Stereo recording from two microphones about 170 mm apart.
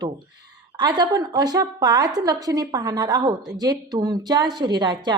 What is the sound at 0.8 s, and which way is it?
Speech, 25° right (ahead or behind).